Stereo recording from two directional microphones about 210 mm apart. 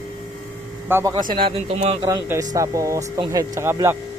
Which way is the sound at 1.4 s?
30° right (ahead or behind).